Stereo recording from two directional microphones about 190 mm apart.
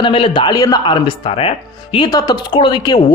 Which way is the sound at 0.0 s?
25° left (ahead or behind).